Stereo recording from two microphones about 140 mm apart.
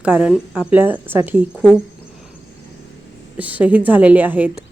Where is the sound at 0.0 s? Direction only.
10° right (ahead or behind).